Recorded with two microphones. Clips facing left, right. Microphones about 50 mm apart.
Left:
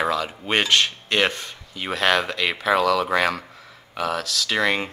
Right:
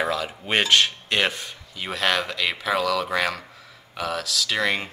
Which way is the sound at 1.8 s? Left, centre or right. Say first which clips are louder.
Left 3 dB; centre.